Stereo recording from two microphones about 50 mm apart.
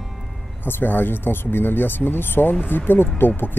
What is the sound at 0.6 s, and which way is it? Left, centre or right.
Speech, left.